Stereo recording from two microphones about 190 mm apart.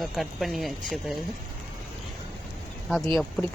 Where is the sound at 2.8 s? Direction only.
Centre (ahead or behind).